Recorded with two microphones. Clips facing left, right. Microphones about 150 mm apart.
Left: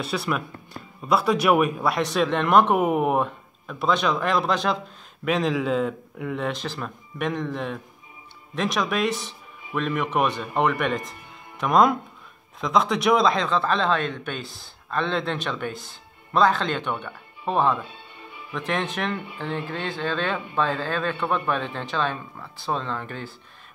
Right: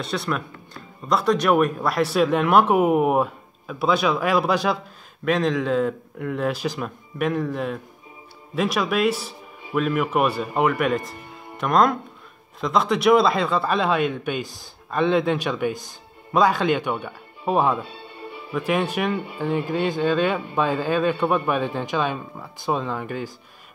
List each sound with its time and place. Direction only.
0.0 s a man's voice: 5° left (ahead or behind)